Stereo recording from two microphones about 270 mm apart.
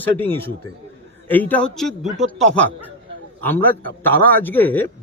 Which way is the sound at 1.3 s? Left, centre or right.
Centre.